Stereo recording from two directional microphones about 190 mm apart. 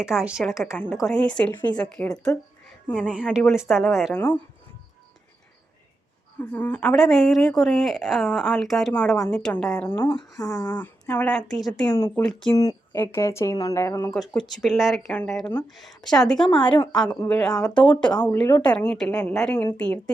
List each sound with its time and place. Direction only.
0.0 s a woman's voice: 5° right (ahead or behind)
6.4 s a woman's voice: 10° left (ahead or behind)
10.1 s speech: 20° left (ahead or behind); by 11.9 s centre (ahead or behind)
11.9 s speech: 15° left (ahead or behind)
14.1 s a woman's voice: 5° left (ahead or behind)